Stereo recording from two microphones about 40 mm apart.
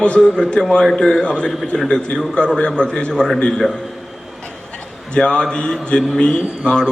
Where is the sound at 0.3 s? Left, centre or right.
Left.